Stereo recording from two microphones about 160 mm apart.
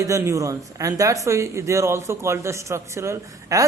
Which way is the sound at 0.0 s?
20° right (ahead or behind).